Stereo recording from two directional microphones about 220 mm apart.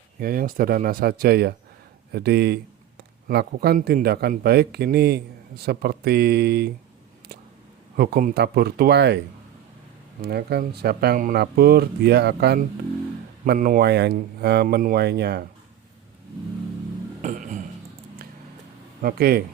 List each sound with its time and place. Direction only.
0.2 s speech: 40° right (ahead or behind)
7.9 s speech: 45° right (ahead or behind)
17.2 s a sound: 35° right (ahead or behind)
19.0 s speech: 45° right (ahead or behind)